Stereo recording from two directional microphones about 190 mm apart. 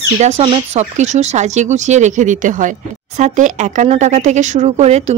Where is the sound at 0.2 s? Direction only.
35° right (ahead or behind).